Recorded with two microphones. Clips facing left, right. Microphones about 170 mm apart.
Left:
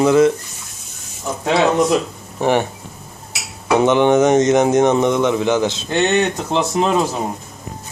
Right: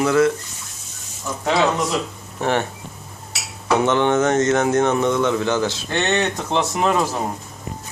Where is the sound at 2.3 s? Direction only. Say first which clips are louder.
Left 4 dB; 15° left (ahead or behind).